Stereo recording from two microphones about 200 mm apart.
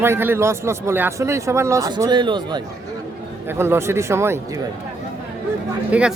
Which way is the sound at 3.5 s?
10° right (ahead or behind).